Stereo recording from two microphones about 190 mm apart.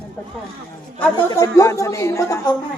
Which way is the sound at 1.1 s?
15° left (ahead or behind).